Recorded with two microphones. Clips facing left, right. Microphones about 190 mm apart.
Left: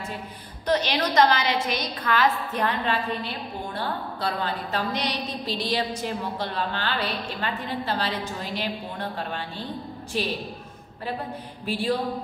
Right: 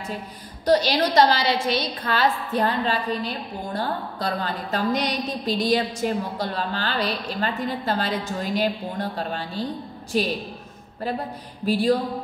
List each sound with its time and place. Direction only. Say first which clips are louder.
0.7 s a woman's voice: right 4 dB; 35° right (ahead or behind)
11.6 s a woman's voice: right 6 dB; 40° right (ahead or behind)